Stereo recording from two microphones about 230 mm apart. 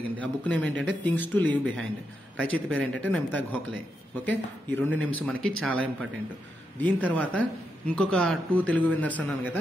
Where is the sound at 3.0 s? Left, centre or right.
Centre.